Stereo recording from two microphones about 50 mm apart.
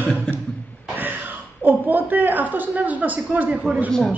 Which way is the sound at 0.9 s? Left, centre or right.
Right.